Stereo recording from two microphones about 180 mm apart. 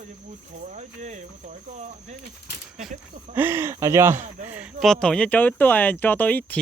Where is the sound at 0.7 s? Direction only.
40° right (ahead or behind).